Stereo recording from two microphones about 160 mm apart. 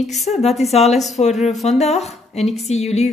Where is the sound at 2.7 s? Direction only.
45° left (ahead or behind).